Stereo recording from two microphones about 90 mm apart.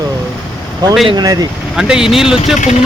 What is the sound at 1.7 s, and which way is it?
Speech, 5° right (ahead or behind).